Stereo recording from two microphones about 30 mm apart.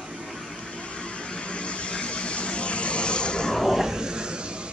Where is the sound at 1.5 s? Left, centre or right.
Left.